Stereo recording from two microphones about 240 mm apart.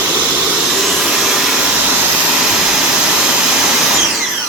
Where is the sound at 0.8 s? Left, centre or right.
Centre.